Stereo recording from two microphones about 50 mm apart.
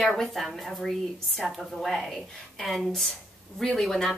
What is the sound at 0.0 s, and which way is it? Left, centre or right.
A woman's voice, centre.